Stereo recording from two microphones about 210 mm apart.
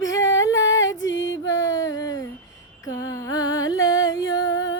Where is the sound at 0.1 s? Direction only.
15° left (ahead or behind).